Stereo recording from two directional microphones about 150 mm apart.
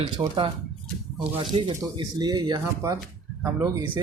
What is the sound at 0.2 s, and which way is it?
Speech, 35° right (ahead or behind).